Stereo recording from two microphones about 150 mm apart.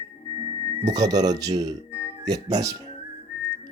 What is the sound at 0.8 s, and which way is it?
Speech, 25° right (ahead or behind).